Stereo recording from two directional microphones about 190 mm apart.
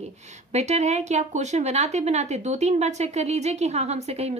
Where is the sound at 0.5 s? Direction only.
35° right (ahead or behind).